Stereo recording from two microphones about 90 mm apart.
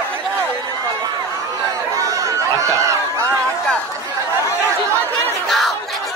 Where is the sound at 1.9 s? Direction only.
40° right (ahead or behind).